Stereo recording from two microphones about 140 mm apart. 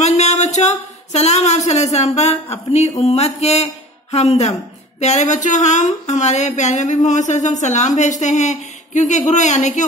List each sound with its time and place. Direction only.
0.0 s speech: 55° left (ahead or behind)
2.5 s a sound: 50° left (ahead or behind)
3.0 s speech: 50° left (ahead or behind)